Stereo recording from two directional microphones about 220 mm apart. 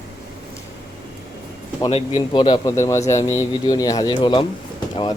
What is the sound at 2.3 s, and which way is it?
Speech, 20° left (ahead or behind).